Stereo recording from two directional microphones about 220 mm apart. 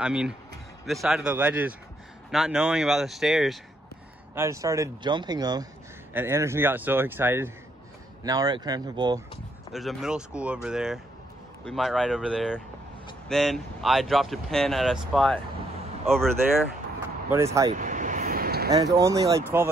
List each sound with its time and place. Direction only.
0.0 s speech: 5° right (ahead or behind)
4.4 s speech: 15° right (ahead or behind)
9.7 s speech: centre (ahead or behind)
17.3 s speech: 10° right (ahead or behind)
17.7 s vehicle: 35° right (ahead or behind)
18.7 s speech: 15° right (ahead or behind)